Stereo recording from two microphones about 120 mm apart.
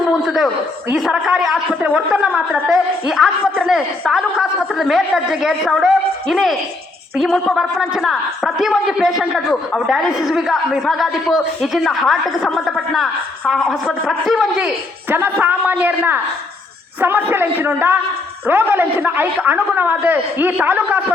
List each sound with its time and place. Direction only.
0.3 s a man's voice: 5° right (ahead or behind)
15.1 s a man's voice: 15° right (ahead or behind)